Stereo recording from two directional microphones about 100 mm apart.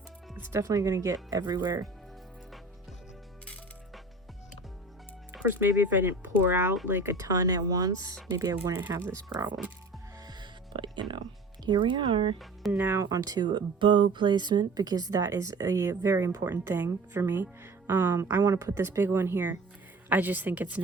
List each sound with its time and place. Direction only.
0.3 s music: 20° right (ahead or behind)
0.6 s speech: 35° right (ahead or behind)
5.5 s speech: 20° right (ahead or behind)
11.6 s speech: 45° right (ahead or behind)
12.7 s speech: 25° right (ahead or behind)